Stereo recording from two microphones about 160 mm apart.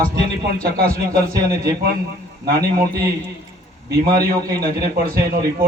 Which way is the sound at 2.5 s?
70° right (ahead or behind).